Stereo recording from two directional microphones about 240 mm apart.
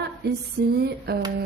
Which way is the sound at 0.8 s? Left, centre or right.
Right.